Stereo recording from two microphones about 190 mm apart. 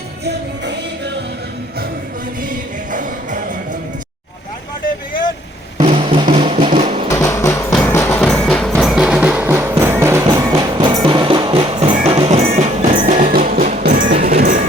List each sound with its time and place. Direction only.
0.3 s music: 65° right (ahead or behind)
2.5 s music: 45° right (ahead or behind)
5.8 s drum: 30° right (ahead or behind)
6.3 s music: 30° right (ahead or behind)
7.1 s music: 15° left (ahead or behind)
7.7 s music: centre (ahead or behind); by 14.6 s 50° right (ahead or behind)